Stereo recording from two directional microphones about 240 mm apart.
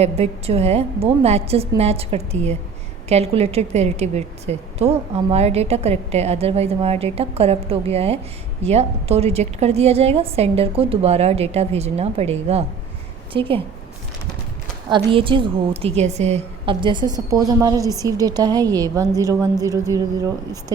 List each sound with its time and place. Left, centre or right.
0.0 s a woman's voice: right
14.8 s a woman's voice: right